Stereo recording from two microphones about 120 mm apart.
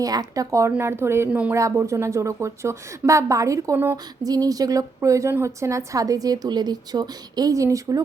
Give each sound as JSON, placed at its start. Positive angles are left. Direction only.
{"t": 0.0, "sound": "speech", "side_deg": -30}
{"t": 1.3, "sound": "speech", "side_deg": -10}
{"t": 1.5, "sound": "speech", "side_deg": -25}